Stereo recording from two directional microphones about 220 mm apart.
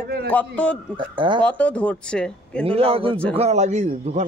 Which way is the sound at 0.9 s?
20° right (ahead or behind).